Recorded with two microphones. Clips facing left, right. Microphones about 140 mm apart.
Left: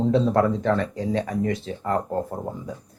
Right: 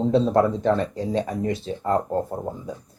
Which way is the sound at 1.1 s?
25° right (ahead or behind).